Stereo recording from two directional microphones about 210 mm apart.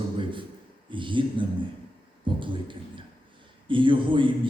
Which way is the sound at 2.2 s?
25° right (ahead or behind).